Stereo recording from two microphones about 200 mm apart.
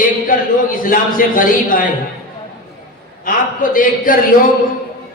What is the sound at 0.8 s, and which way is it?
A man's voice, 45° left (ahead or behind).